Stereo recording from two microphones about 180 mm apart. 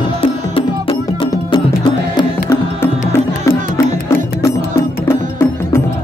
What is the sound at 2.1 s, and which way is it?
Music, 15° left (ahead or behind).